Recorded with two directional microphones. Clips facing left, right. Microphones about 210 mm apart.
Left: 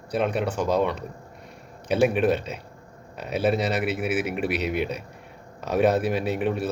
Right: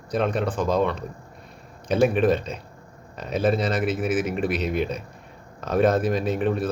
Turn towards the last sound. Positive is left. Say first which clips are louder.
# right 2 dB
turn(degrees=10)  # may be behind; listen again after turning